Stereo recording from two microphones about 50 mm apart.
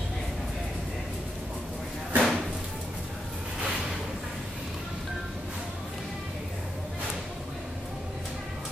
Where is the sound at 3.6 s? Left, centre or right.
Right.